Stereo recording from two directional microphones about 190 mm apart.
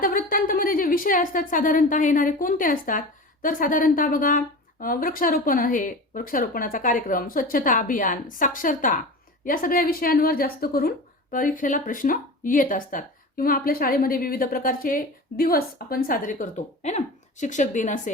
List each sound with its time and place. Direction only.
0.0 s a woman's voice: 50° left (ahead or behind)